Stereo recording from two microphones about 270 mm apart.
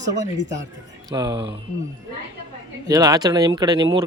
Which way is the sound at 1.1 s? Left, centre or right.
Centre.